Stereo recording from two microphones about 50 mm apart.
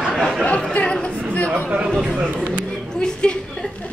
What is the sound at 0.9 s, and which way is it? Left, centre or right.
Chatter, left.